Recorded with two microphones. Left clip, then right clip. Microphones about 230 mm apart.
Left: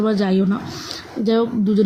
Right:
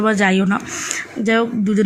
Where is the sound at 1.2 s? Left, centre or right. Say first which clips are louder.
Right 1 dB; right.